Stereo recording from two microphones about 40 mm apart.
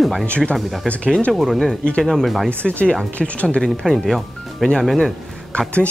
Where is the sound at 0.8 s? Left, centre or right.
Centre.